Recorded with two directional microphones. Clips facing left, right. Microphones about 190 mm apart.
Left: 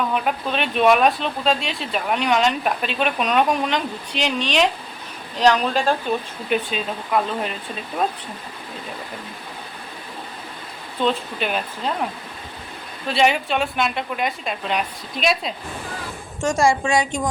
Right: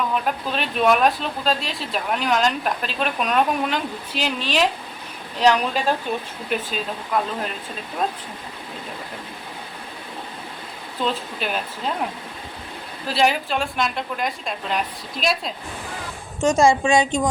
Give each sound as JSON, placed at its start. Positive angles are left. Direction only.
{"t": 0.1, "sound": "a woman's voice", "side_deg": 0}
{"t": 11.0, "sound": "speech", "side_deg": 0}
{"t": 13.1, "sound": "speech", "side_deg": 0}
{"t": 16.4, "sound": "a woman's voice", "side_deg": -20}